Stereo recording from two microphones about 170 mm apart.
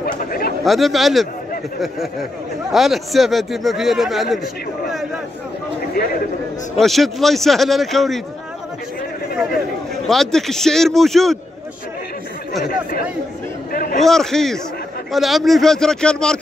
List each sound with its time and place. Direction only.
0.0 s chatter: 60° left (ahead or behind)
0.7 s a man's voice: centre (ahead or behind)
6.8 s a man's voice: centre (ahead or behind)
10.0 s a man's voice: centre (ahead or behind)
13.7 s a sound: 60° left (ahead or behind)
13.9 s a man's voice: centre (ahead or behind)